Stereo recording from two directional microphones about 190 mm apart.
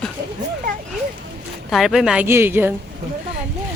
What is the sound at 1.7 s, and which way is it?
Speech, centre (ahead or behind).